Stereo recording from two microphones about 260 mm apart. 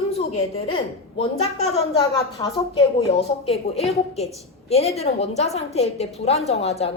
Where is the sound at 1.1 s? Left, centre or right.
Left.